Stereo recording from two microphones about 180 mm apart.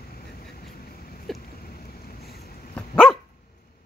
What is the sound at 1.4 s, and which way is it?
Boat, 55° left (ahead or behind).